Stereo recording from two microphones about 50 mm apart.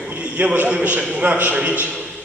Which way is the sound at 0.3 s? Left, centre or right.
Right.